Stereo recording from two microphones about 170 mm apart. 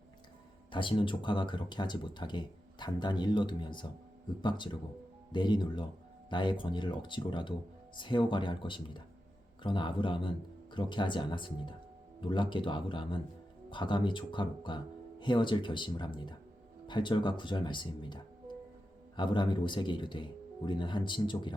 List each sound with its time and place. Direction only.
0.7 s speech: 30° left (ahead or behind)